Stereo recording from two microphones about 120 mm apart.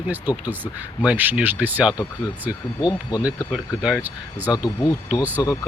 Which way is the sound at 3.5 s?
5° right (ahead or behind).